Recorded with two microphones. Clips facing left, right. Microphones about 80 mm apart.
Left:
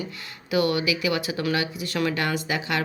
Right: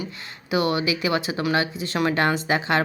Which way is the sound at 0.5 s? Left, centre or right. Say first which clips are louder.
Right 1 dB; right.